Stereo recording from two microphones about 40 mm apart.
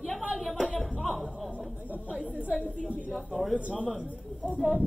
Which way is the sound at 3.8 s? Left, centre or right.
Centre.